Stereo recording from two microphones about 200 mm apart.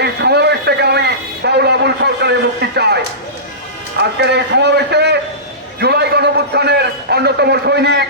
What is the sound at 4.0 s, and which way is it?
A man's voice, 55° right (ahead or behind).